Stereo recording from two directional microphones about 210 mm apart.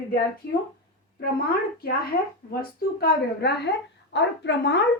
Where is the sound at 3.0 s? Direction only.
50° left (ahead or behind).